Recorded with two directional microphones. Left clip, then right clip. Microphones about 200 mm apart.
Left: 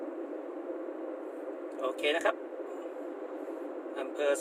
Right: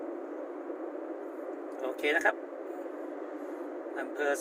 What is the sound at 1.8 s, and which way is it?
Speech, 15° left (ahead or behind).